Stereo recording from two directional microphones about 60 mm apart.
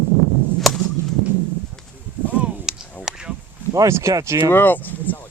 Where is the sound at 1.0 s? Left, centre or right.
Right.